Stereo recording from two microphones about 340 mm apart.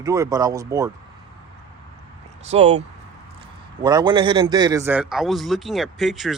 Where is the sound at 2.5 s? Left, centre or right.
Centre.